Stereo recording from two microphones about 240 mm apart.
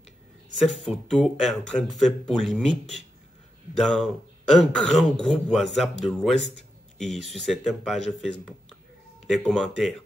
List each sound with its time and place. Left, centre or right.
0.7 s speech: centre